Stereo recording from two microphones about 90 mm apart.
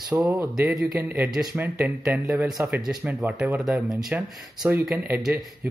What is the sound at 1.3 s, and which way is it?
Speech, 5° right (ahead or behind).